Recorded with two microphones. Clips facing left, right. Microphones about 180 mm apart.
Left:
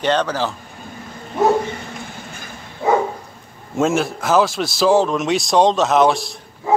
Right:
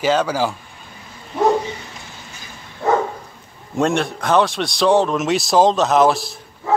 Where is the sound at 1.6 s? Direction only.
55° left (ahead or behind).